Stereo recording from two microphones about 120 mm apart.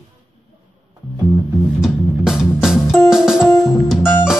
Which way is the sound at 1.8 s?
5° right (ahead or behind).